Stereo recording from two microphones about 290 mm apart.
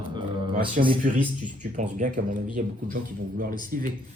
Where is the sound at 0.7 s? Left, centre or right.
Right.